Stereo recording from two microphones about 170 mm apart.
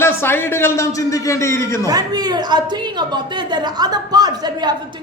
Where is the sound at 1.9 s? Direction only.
25° right (ahead or behind).